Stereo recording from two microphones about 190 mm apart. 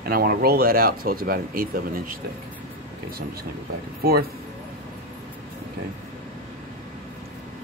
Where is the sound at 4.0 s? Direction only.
55° right (ahead or behind).